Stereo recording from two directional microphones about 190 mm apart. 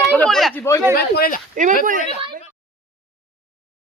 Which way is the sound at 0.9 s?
55° left (ahead or behind).